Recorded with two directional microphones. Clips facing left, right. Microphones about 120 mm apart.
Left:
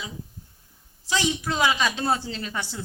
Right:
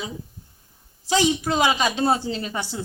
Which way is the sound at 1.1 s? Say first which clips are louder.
Right 5 dB; 25° right (ahead or behind).